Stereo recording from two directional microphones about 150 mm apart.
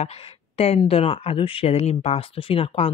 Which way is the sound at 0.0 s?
45° left (ahead or behind).